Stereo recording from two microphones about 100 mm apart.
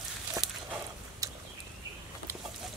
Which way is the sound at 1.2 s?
35° right (ahead or behind).